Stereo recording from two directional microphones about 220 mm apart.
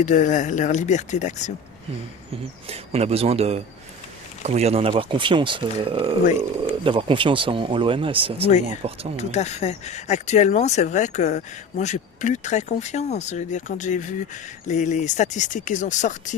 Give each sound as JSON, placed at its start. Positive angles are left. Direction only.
{"t": 0.0, "sound": "speech", "side_deg": 35}
{"t": 2.6, "sound": "speech", "side_deg": -25}
{"t": 8.4, "sound": "speech", "side_deg": 30}